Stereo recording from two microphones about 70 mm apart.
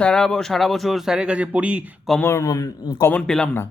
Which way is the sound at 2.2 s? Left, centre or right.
Left.